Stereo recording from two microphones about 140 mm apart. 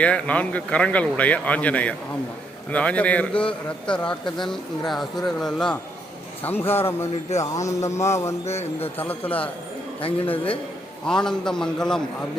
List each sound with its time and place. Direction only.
0.0 s speech: 10° left (ahead or behind)
6.4 s a man's voice: 15° left (ahead or behind)
8.4 s a man's voice: 50° left (ahead or behind)
9.0 s speech: 10° left (ahead or behind)
10.0 s a man's voice: 40° left (ahead or behind)
11.0 s speech: 5° left (ahead or behind)